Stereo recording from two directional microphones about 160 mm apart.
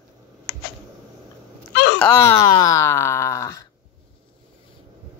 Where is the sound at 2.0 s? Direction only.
15° left (ahead or behind).